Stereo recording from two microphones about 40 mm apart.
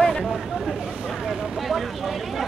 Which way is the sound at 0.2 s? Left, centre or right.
Centre.